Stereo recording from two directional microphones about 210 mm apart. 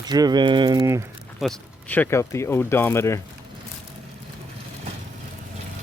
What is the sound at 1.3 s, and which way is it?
Speech, 5° left (ahead or behind).